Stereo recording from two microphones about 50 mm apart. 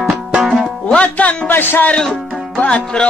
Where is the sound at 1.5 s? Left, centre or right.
Left.